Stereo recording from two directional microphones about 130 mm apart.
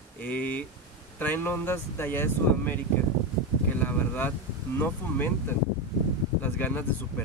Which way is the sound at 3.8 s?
15° left (ahead or behind).